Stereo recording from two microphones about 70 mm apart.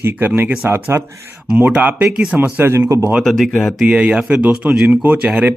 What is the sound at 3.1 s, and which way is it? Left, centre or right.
Speech, centre.